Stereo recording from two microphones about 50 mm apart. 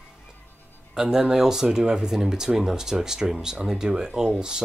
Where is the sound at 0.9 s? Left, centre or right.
Centre.